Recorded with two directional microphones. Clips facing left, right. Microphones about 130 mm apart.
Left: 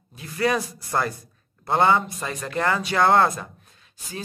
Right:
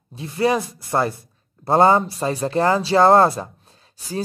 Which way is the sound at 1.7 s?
35° right (ahead or behind).